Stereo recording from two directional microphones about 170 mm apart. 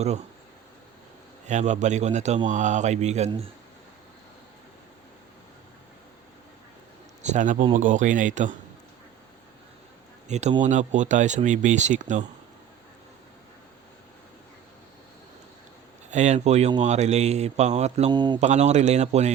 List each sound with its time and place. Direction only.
1.5 s speech: 45° right (ahead or behind)
7.2 s speech: 45° right (ahead or behind)
10.2 s speech: 40° right (ahead or behind)
16.0 s speech: 45° right (ahead or behind)
18.1 s speech: 25° right (ahead or behind)
18.3 s speech: 40° right (ahead or behind)